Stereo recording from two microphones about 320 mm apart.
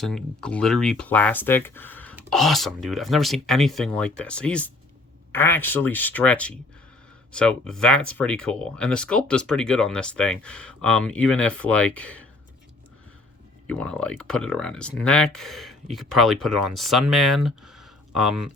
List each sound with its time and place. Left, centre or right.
0.0 s speech: centre
13.7 s speech: centre